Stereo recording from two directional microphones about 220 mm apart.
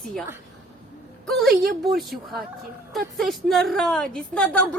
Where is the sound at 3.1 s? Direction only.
Centre (ahead or behind).